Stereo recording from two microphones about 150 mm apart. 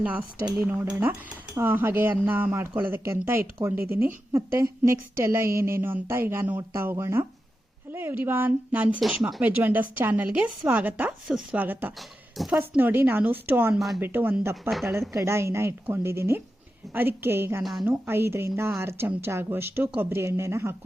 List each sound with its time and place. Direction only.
0.0 s a woman's voice: 10° right (ahead or behind)
11.9 s speech: centre (ahead or behind)
12.5 s a woman's voice: 15° right (ahead or behind)
13.7 s speech: centre (ahead or behind)
14.0 s a woman's voice: 10° right (ahead or behind)
14.7 s speech: centre (ahead or behind)
15.1 s a woman's voice: 15° right (ahead or behind)
17.6 s speech: centre (ahead or behind)
17.8 s a woman's voice: 15° right (ahead or behind)